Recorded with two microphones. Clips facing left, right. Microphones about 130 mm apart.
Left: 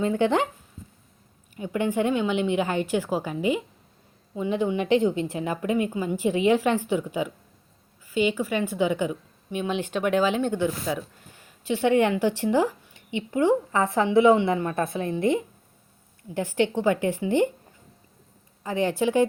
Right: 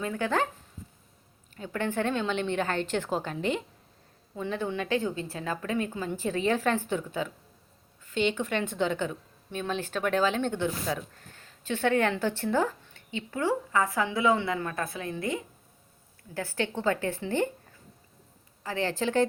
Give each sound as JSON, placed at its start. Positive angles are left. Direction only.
{"t": 0.0, "sound": "speech", "side_deg": 25}
{"t": 1.5, "sound": "a woman's voice", "side_deg": 15}
{"t": 18.6, "sound": "a woman's voice", "side_deg": 15}